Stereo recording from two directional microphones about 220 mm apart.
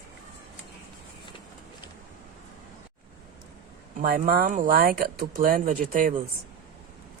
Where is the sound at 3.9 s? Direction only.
40° right (ahead or behind).